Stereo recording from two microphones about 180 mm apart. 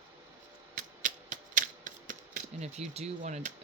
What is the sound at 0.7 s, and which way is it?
Typewriter, 45° right (ahead or behind).